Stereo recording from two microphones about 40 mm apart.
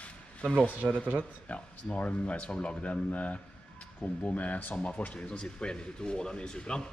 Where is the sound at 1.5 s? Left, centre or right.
Left.